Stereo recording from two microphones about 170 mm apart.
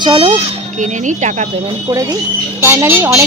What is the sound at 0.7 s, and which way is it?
Speech, 45° right (ahead or behind).